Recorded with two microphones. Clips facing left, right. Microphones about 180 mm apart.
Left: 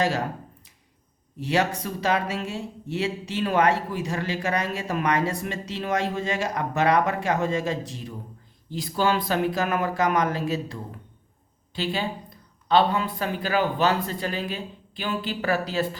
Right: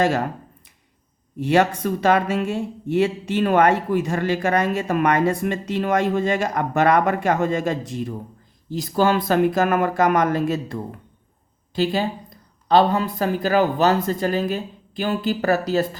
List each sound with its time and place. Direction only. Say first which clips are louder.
1.4 s speech: right 6 dB; 55° right (ahead or behind)